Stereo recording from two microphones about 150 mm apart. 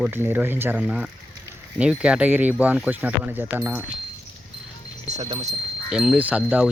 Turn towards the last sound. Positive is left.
turn(degrees=-10)  # may be behind; listen again after turning